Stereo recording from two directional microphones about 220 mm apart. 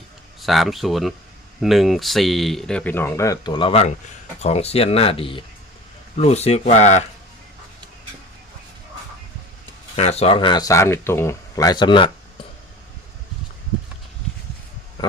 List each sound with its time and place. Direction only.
0.4 s speech: centre (ahead or behind); by 7.0 s 30° left (ahead or behind)
9.9 s speech: 30° left (ahead or behind)